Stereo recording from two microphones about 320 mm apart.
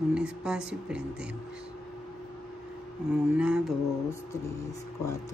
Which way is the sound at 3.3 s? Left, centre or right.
Centre.